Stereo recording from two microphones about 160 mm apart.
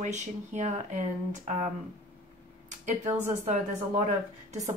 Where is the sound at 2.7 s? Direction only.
45° right (ahead or behind).